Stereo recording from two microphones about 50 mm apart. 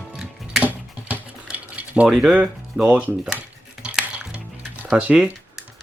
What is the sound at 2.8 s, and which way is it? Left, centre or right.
Speech, right.